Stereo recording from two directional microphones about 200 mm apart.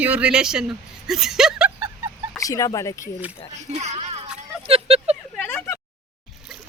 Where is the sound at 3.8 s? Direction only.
30° right (ahead or behind).